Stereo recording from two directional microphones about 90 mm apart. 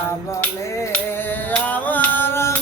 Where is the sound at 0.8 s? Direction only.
25° left (ahead or behind).